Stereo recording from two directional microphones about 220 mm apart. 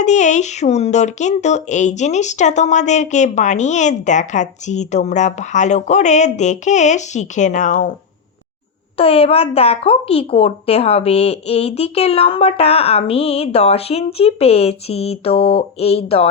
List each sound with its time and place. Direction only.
0.0 s speech: 35° left (ahead or behind)
9.0 s a woman's voice: 25° left (ahead or behind)